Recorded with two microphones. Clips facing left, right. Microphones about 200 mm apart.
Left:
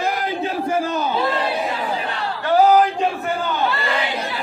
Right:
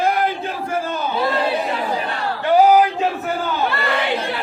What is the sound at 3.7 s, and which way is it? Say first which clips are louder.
Crowd: right 1 dB; 60° right (ahead or behind).